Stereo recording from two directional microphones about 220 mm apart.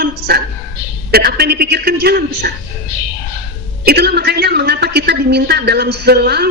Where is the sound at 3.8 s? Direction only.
45° right (ahead or behind).